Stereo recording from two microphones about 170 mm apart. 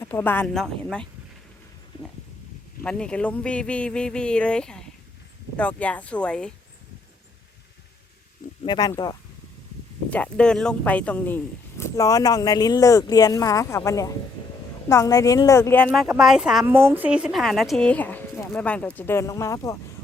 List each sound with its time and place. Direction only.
0.0 s speech: 10° left (ahead or behind)
2.8 s speech: 5° left (ahead or behind)
8.6 s speech: 25° left (ahead or behind)
10.1 s speech: 5° left (ahead or behind)
15.9 s speech: 5° right (ahead or behind); by 19.7 s 20° left (ahead or behind)